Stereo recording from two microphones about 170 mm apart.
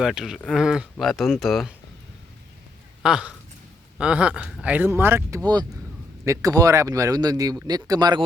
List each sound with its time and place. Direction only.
0.0 s speech: 5° right (ahead or behind)
3.0 s speech: 5° right (ahead or behind)
4.4 s speech: 5° left (ahead or behind)
4.6 s speech: 10° right (ahead or behind); by 8.2 s 25° right (ahead or behind)